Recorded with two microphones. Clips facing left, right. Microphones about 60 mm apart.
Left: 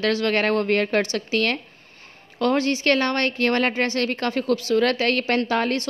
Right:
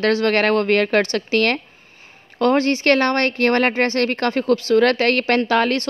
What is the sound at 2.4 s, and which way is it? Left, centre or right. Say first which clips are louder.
Speech: right 4 dB; right.